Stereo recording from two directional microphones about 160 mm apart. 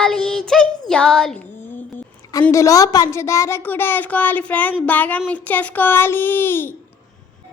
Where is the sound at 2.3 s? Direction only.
20° left (ahead or behind).